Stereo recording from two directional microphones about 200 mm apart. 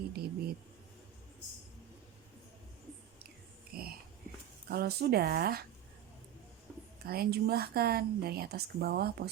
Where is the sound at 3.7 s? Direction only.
50° right (ahead or behind).